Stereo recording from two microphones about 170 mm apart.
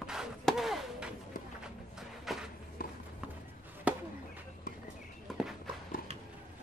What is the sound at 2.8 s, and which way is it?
Run, 60° left (ahead or behind).